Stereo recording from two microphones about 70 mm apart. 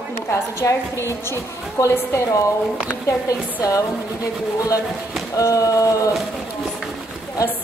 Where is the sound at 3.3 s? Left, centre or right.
Left.